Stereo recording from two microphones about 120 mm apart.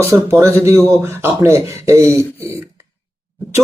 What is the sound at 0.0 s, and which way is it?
Speech, 25° right (ahead or behind).